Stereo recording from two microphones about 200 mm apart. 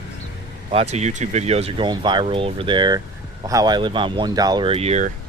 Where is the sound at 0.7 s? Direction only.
30° right (ahead or behind).